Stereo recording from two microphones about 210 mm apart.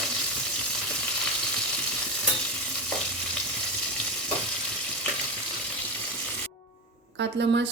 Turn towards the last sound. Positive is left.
turn(degrees=-55)  # may be behind; listen again after turning